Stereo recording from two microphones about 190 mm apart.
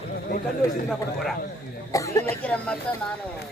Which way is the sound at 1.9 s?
15° left (ahead or behind).